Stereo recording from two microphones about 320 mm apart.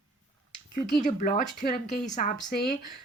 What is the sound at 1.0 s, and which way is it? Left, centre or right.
Speech, left.